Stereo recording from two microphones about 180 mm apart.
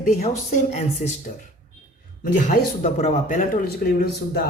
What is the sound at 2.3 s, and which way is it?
Speech, 45° left (ahead or behind).